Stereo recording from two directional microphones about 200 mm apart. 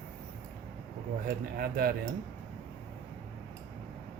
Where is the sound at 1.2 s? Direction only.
50° right (ahead or behind).